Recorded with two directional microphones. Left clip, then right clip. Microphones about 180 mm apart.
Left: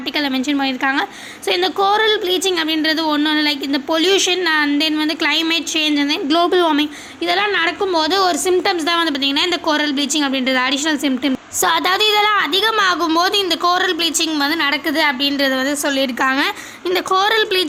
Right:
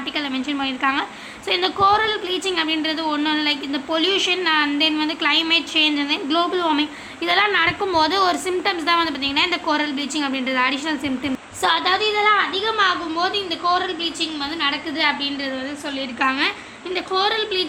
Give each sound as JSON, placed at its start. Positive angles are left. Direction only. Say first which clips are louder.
{"t": 0.2, "sound": "a woman's voice", "louder": "left 6 dB", "side_deg": 25}
{"t": 7.3, "sound": "a woman's voice", "louder": "left 1 dB", "side_deg": 15}
{"t": 11.6, "sound": "a woman's voice", "louder": "left 3 dB", "side_deg": 55}